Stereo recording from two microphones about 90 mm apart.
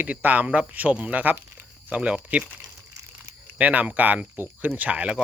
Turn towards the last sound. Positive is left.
turn(degrees=-15)  # may be behind; listen again after turning